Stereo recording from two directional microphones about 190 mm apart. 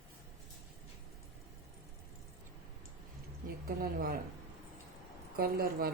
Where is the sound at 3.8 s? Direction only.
50° right (ahead or behind).